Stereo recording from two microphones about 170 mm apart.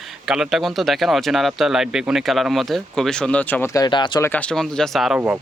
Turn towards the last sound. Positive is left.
turn(degrees=0)  # may be behind; listen again after turning